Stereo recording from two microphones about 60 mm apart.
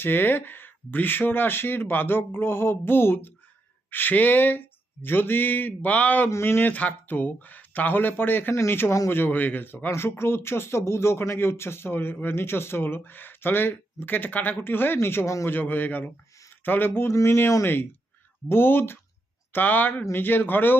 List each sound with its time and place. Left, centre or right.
0.0 s speech: left
6.3 s speech: left
8.5 s speech: left
9.0 s speech: left
9.8 s speech: left